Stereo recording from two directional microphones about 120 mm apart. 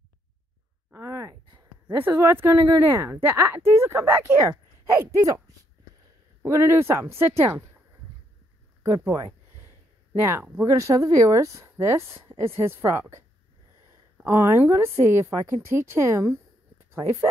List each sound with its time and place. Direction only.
0.9 s a sound: 20° right (ahead or behind)
2.0 s speech: 20° right (ahead or behind)
6.4 s speech: 20° right (ahead or behind)
8.8 s speech: 25° right (ahead or behind)
14.2 s speech: 20° right (ahead or behind)